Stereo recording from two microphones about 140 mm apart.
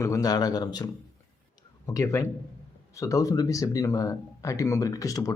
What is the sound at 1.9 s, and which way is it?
Speech, 20° left (ahead or behind).